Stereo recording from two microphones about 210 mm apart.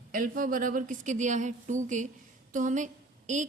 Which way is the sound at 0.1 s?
40° right (ahead or behind).